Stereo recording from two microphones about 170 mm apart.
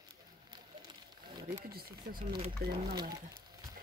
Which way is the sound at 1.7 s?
65° right (ahead or behind).